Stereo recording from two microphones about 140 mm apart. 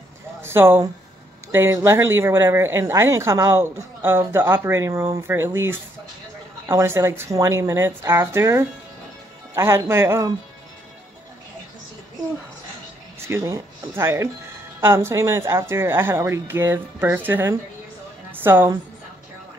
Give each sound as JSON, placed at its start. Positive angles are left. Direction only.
{"t": 0.4, "sound": "speech", "side_deg": -15}
{"t": 13.2, "sound": "a woman's voice", "side_deg": -20}